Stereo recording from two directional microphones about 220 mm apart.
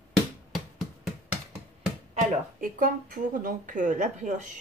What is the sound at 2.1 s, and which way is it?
Speech, 40° right (ahead or behind).